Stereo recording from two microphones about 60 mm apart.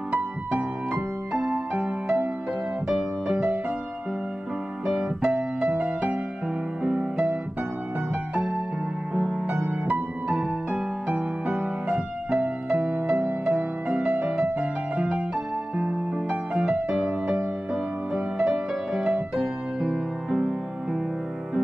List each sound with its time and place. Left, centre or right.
0.1 s music: centre
4.8 s keyboard: centre
6.8 s music: centre
9.1 s music: centre
9.8 s music: right
10.3 s music: centre
11.1 s music: right